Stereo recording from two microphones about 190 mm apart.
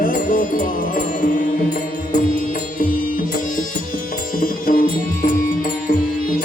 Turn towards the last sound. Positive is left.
turn(degrees=50)  # may be behind; listen again after turning